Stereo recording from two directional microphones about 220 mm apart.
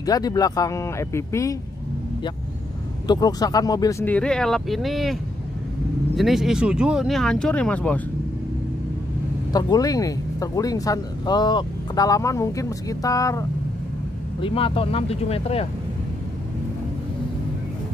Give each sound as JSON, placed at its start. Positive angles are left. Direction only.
{"t": 0.0, "sound": "speech", "side_deg": 15}
{"t": 3.1, "sound": "speech", "side_deg": 15}
{"t": 6.1, "sound": "speech", "side_deg": 0}
{"t": 9.5, "sound": "speech", "side_deg": 15}